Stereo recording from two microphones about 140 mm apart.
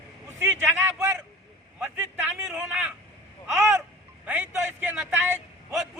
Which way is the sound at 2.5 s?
Centre (ahead or behind).